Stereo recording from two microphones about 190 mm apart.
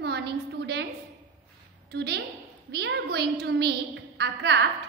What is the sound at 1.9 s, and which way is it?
A woman's voice, 60° right (ahead or behind).